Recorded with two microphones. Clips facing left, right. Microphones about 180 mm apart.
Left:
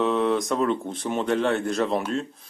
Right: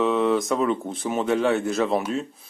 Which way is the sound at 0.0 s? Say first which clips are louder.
Right 1 dB; centre (ahead or behind).